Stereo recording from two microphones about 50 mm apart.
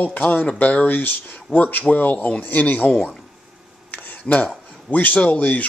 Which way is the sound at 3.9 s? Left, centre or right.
Left.